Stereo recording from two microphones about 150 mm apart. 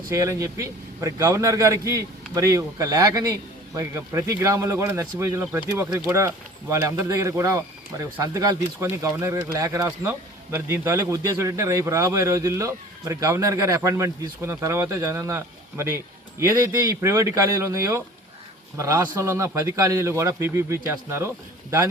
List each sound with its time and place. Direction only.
0.1 s speech: 20° right (ahead or behind)